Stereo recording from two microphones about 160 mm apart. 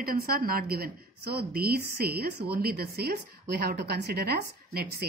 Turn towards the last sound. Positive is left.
turn(degrees=-75)  # may be behind; listen again after turning